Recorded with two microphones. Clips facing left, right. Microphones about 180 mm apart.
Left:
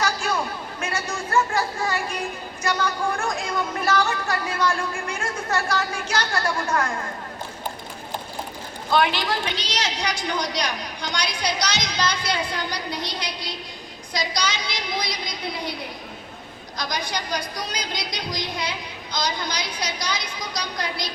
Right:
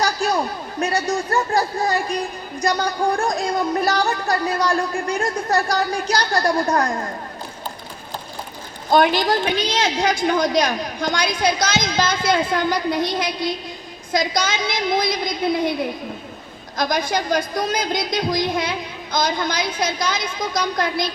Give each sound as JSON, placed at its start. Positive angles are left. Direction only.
{"t": 0.0, "sound": "a man's voice", "side_deg": -35}
{"t": 8.9, "sound": "a woman's voice", "side_deg": -40}